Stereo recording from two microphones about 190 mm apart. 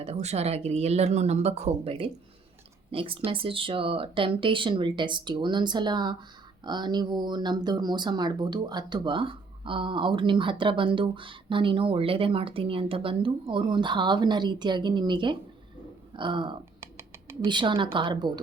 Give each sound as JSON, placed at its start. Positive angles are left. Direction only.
{"t": 0.0, "sound": "speech", "side_deg": -35}
{"t": 16.8, "sound": "a sound", "side_deg": -15}
{"t": 17.4, "sound": "speech", "side_deg": -25}